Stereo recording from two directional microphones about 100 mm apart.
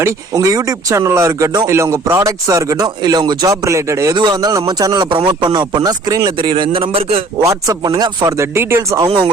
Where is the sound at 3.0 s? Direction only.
45° right (ahead or behind).